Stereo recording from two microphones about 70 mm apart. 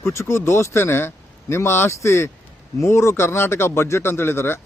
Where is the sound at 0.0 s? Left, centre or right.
Left.